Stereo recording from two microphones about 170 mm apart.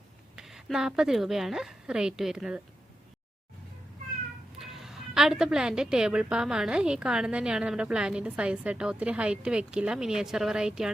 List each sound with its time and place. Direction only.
0.3 s speech: centre (ahead or behind)
4.5 s a woman's voice: centre (ahead or behind)